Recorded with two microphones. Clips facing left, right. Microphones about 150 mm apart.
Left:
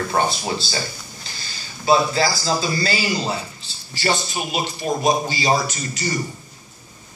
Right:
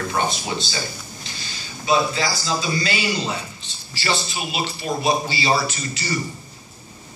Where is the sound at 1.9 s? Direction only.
40° left (ahead or behind).